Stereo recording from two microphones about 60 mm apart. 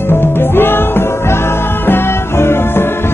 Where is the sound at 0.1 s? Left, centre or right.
Left.